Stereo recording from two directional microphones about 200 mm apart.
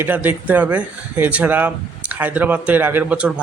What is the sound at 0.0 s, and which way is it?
Speech, 10° right (ahead or behind).